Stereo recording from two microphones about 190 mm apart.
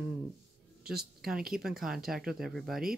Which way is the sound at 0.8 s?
55° right (ahead or behind).